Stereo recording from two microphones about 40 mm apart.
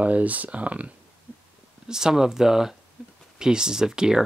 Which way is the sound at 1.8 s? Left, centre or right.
Centre.